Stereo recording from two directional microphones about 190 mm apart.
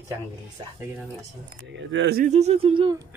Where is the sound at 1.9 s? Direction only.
60° right (ahead or behind).